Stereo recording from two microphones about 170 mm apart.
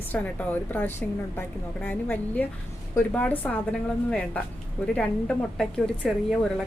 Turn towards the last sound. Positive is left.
turn(degrees=0)  # may be behind; listen again after turning